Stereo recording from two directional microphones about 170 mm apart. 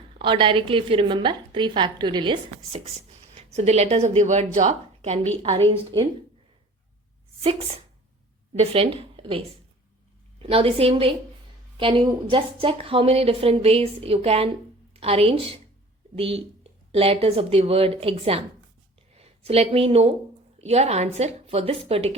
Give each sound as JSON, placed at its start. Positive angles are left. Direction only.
{"t": 0.2, "sound": "a woman's voice", "side_deg": -30}
{"t": 3.5, "sound": "a woman's voice", "side_deg": -40}
{"t": 8.5, "sound": "speech", "side_deg": -35}
{"t": 10.4, "sound": "a woman's voice", "side_deg": -35}